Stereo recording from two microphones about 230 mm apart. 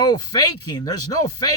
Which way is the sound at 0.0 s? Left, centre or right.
Centre.